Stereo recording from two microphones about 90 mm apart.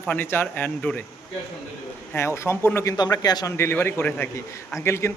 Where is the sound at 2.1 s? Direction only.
30° left (ahead or behind).